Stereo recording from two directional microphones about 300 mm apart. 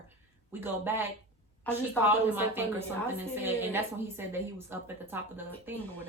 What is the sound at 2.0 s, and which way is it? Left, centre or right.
A woman's voice, centre.